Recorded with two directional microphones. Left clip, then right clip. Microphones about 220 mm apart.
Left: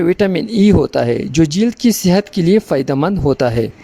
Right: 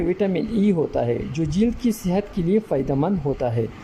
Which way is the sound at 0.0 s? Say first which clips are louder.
Left 8 dB; 45° left (ahead or behind).